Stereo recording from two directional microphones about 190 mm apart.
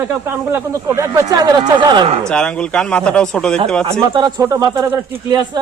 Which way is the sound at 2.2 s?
5° left (ahead or behind).